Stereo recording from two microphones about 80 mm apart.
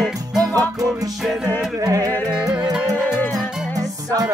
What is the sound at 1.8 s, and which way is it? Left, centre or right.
Music, right.